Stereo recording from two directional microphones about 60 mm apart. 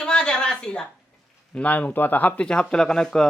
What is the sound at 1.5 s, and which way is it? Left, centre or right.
Speech, left.